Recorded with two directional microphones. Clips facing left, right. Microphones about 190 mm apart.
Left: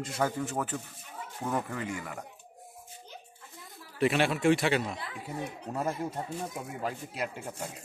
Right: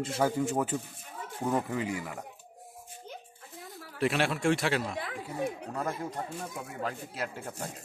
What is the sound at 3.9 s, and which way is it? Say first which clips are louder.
Speech: left 2 dB; centre (ahead or behind).